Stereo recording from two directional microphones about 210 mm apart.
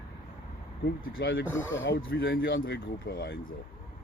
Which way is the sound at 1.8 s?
50° left (ahead or behind).